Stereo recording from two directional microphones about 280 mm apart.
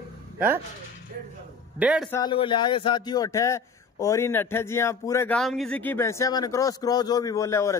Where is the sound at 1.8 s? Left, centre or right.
Centre.